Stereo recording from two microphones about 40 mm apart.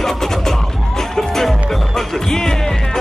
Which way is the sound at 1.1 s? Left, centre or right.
Centre.